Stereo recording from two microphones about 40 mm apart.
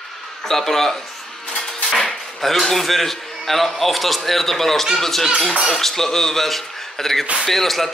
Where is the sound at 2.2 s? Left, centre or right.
Centre.